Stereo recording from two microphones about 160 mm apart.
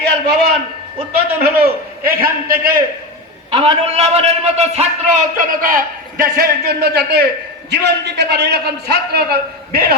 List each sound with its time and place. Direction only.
0.0 s a man's voice: 90° right
1.4 s a man's voice: 75° right (ahead or behind)
3.5 s a man's voice: 35° right (ahead or behind); by 9.8 s 85° right